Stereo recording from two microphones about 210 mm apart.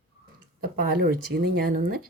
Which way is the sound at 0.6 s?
45° right (ahead or behind).